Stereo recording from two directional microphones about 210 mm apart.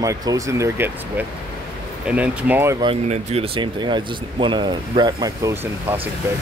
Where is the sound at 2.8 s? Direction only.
30° right (ahead or behind).